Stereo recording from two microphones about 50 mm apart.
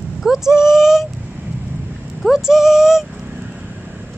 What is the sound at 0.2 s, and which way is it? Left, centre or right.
Speech, centre.